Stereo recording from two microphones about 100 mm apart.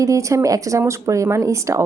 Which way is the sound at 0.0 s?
30° right (ahead or behind).